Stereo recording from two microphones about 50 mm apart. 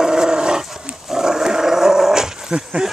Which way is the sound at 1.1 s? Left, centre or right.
Centre.